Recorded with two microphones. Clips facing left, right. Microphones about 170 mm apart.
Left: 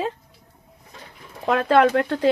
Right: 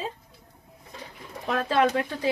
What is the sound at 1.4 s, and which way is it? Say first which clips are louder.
Speech: left 6 dB; 75° left (ahead or behind).